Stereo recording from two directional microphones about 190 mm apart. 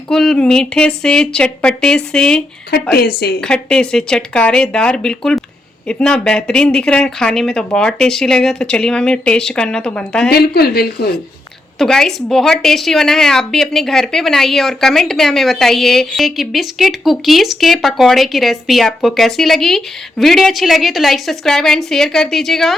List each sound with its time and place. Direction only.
0.1 s a woman's voice: centre (ahead or behind)
2.7 s speech: 55° left (ahead or behind)
3.4 s a woman's voice: 5° left (ahead or behind)
10.2 s speech: 55° left (ahead or behind)
11.8 s a woman's voice: centre (ahead or behind)